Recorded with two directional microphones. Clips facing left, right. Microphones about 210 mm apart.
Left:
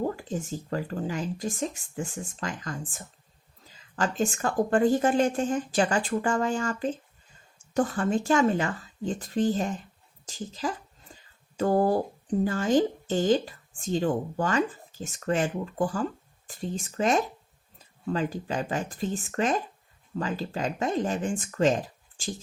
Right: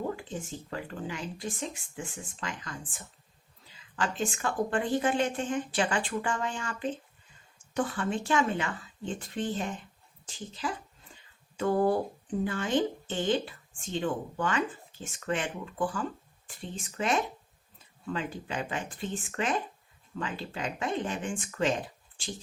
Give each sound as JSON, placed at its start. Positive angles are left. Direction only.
{"t": 0.2, "sound": "speech", "side_deg": 40}
{"t": 11.1, "sound": "a sound", "side_deg": 40}
{"t": 12.5, "sound": "speech", "side_deg": 40}